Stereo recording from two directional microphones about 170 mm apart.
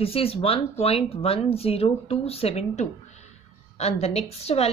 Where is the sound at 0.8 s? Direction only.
35° left (ahead or behind).